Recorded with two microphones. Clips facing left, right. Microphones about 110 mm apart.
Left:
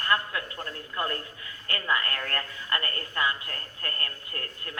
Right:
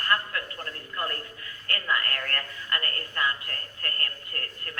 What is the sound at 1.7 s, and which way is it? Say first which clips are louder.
A woman's voice: left 1 dB; 15° left (ahead or behind).